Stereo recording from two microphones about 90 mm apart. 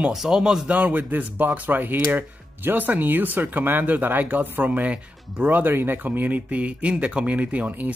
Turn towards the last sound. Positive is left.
turn(degrees=-20)  # may be behind; listen again after turning